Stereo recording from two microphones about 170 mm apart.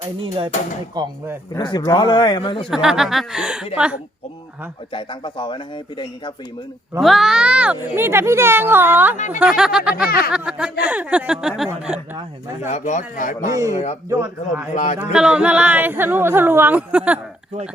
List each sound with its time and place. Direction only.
0.0 s speech: 30° right (ahead or behind)
1.0 s speech: 20° right (ahead or behind)
1.5 s a man's voice: 25° left (ahead or behind)
2.6 s speech: 5° right (ahead or behind)
4.9 s a man's voice: 30° left (ahead or behind)
7.0 s speech: centre (ahead or behind)
9.1 s speech: 45° left (ahead or behind)
9.4 s speech: 5° right (ahead or behind)
10.1 s speech: 65° left (ahead or behind)
10.3 s speech: 5° right (ahead or behind)
12.6 s speech: 45° left (ahead or behind)
13.5 s speech: 20° right (ahead or behind)
13.7 s speech: 40° left (ahead or behind)
14.1 s speech: 15° right (ahead or behind)